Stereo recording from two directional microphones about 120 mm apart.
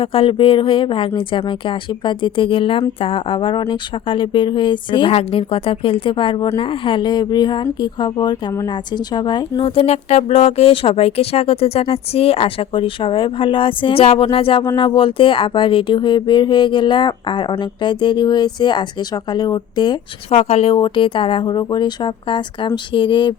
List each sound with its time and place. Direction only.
0.0 s speech: 50° left (ahead or behind)
9.6 s speech: 55° left (ahead or behind); by 20.0 s 35° left (ahead or behind)
20.3 s speech: 60° left (ahead or behind)
20.7 s speech: 45° left (ahead or behind)